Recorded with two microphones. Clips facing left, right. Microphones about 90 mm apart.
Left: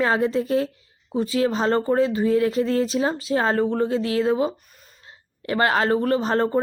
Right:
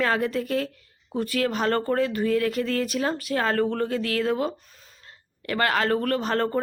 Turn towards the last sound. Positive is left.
turn(degrees=25)  # may be behind; listen again after turning